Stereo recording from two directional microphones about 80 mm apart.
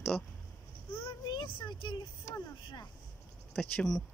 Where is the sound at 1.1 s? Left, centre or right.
Left.